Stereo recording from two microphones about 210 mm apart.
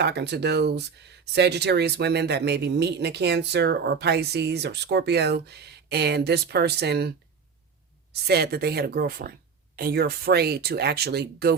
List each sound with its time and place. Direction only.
0.0 s speech: 55° right (ahead or behind)
8.1 s speech: 50° right (ahead or behind)